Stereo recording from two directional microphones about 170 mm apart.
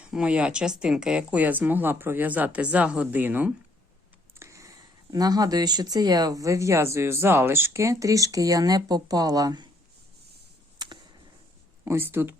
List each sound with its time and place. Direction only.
0.0 s speech: 5° right (ahead or behind)
4.4 s a sound: 15° right (ahead or behind)
5.1 s speech: 20° right (ahead or behind)
11.9 s speech: 15° right (ahead or behind)